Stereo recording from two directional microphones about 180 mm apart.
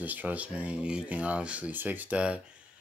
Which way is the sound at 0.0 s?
10° right (ahead or behind).